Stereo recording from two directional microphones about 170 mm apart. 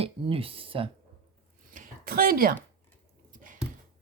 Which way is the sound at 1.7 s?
55° right (ahead or behind).